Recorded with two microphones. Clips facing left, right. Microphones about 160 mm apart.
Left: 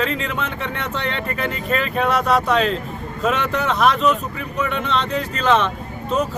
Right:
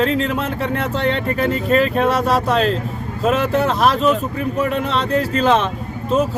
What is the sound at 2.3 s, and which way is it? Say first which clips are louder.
Speech: right 1 dB; 35° right (ahead or behind).